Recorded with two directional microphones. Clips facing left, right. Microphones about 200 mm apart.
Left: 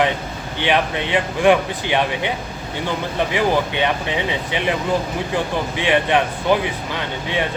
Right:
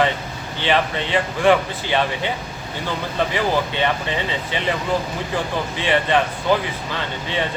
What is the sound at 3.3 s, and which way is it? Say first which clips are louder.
Speech: left 4 dB; 15° left (ahead or behind).